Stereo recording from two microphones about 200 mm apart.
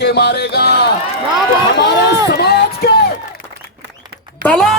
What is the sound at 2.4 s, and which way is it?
Music, 50° left (ahead or behind).